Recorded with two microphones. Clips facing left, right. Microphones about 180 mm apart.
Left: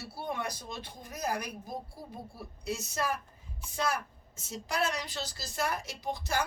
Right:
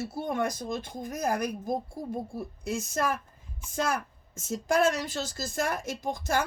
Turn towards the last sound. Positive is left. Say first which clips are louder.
# right 4 dB
turn(degrees=-50)  # may be behind; listen again after turning